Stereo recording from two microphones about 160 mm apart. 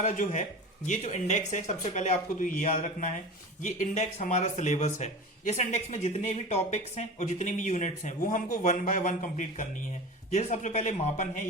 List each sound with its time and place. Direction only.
0.0 s speech: 50° left (ahead or behind)